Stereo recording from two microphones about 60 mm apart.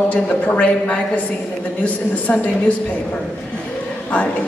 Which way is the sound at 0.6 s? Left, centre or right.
Centre.